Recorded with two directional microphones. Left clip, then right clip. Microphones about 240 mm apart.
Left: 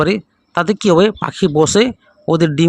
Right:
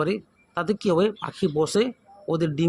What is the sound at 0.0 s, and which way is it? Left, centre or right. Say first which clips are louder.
Speech: left 10 dB; left.